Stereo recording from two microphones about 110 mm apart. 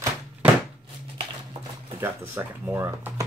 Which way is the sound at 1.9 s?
20° right (ahead or behind).